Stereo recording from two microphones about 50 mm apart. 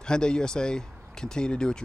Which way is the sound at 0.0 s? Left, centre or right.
Centre.